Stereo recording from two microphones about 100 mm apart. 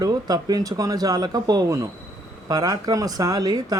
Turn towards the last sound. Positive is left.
turn(degrees=-40)  # may be behind; listen again after turning